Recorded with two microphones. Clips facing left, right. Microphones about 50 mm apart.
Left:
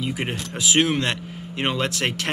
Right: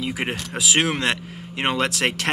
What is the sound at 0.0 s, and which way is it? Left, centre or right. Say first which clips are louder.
Speech: right 1 dB; right.